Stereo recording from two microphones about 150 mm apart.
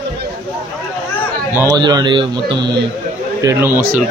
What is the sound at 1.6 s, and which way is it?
Speech, 25° right (ahead or behind).